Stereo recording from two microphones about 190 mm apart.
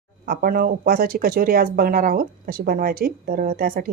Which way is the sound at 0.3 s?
50° right (ahead or behind).